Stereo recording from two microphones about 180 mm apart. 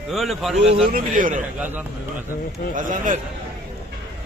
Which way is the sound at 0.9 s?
50° right (ahead or behind).